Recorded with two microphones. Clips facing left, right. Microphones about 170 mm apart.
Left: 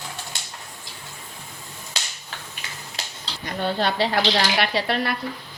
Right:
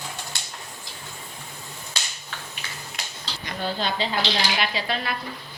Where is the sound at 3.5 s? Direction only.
60° left (ahead or behind).